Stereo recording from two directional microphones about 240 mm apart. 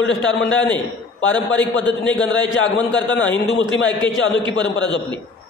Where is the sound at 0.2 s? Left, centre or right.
Left.